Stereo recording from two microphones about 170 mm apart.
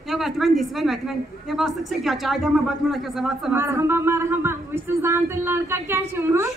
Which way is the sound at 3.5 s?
15° right (ahead or behind).